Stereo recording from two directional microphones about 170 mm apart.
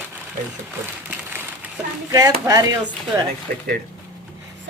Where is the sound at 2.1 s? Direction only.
20° right (ahead or behind).